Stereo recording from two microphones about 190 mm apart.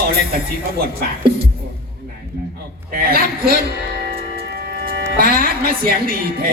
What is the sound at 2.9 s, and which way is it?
Speech, 50° right (ahead or behind).